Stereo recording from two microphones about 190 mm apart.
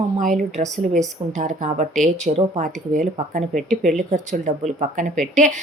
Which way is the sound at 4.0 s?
40° right (ahead or behind).